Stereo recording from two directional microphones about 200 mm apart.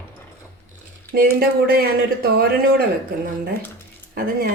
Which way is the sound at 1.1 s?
50° right (ahead or behind).